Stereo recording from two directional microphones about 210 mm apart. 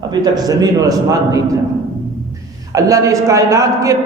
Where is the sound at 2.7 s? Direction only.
15° right (ahead or behind).